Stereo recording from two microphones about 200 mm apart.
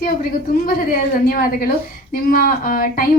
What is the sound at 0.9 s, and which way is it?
A woman's voice, 45° left (ahead or behind).